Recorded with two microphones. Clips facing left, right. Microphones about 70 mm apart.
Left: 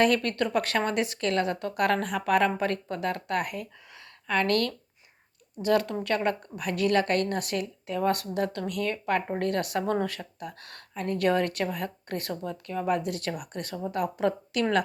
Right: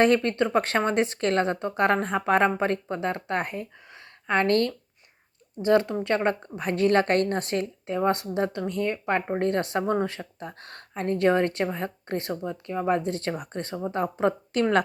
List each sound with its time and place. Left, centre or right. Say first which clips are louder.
0.0 s a woman's voice: right 3 dB; right